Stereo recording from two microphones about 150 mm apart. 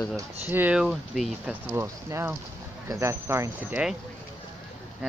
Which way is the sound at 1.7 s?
15° right (ahead or behind).